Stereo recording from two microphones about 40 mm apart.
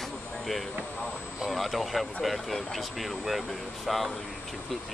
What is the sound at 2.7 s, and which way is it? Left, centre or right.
Speech, centre.